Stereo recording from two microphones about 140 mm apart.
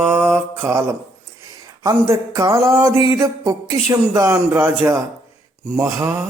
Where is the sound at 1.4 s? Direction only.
25° right (ahead or behind).